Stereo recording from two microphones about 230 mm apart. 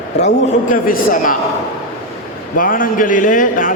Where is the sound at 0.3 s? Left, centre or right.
Left.